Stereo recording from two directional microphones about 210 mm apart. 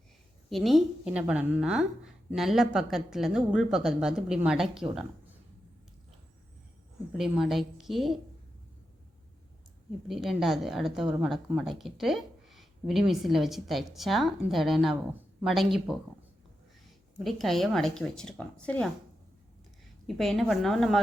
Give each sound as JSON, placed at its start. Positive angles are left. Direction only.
{"t": 0.5, "sound": "speech", "side_deg": 0}
{"t": 7.1, "sound": "speech", "side_deg": 0}
{"t": 10.1, "sound": "speech", "side_deg": 0}
{"t": 17.2, "sound": "speech", "side_deg": 0}
{"t": 20.1, "sound": "speech", "side_deg": 0}